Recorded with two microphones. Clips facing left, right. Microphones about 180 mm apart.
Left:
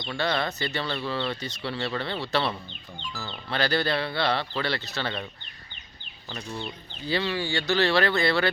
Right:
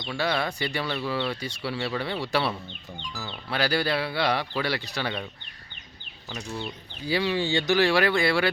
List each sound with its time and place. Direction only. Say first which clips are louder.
0.0 s speech: even; 5° right (ahead or behind)
6.3 s speech: right 1 dB; 5° right (ahead or behind)